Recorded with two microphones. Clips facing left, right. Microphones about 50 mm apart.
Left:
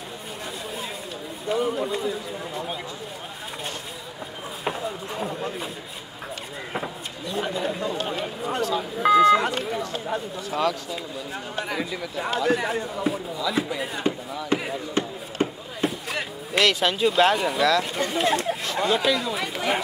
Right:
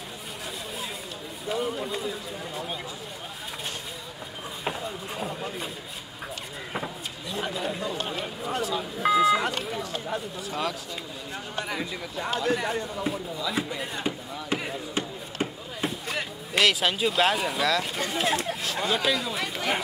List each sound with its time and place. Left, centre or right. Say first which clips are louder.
1.5 s speech: left 5 dB; centre
4.6 s a sound: left 4 dB; centre
6.7 s speech: left 2 dB; centre